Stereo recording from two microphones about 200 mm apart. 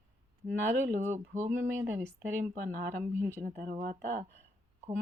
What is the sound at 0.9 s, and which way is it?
Speech, 35° right (ahead or behind).